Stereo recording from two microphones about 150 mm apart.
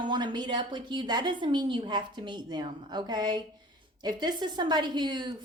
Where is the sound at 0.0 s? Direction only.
30° right (ahead or behind).